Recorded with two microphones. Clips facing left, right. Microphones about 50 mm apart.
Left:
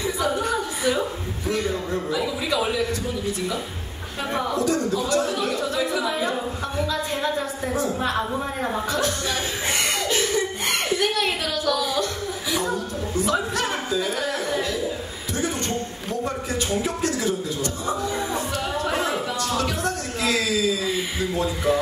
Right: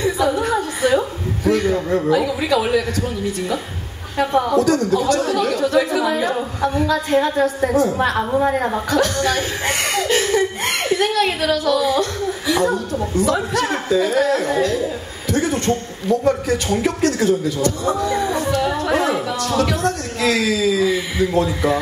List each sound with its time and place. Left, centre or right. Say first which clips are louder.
0.0 s a sound: right 6 dB; right
2.0 s speech: right 8 dB; right
9.9 s chuckle: right 9 dB; right
15.3 s a man's voice: right 7 dB; right